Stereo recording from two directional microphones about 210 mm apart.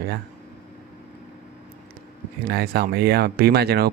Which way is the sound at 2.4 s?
50° right (ahead or behind).